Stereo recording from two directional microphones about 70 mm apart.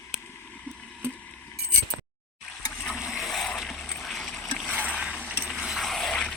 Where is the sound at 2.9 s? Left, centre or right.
Centre.